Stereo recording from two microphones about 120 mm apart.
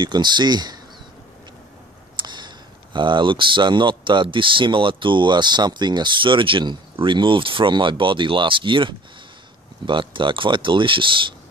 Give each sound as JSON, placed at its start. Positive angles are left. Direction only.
{"t": 0.0, "sound": "speech", "side_deg": -40}
{"t": 2.1, "sound": "speech", "side_deg": -40}